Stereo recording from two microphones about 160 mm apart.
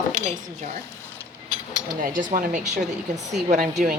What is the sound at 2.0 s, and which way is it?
Speech, 60° right (ahead or behind).